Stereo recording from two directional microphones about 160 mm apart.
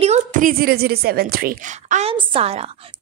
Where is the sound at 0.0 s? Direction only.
50° right (ahead or behind).